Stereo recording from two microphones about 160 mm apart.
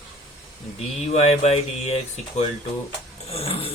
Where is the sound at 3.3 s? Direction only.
35° left (ahead or behind).